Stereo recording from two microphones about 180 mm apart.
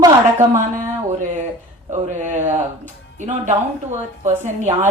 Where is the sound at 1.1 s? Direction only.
45° right (ahead or behind).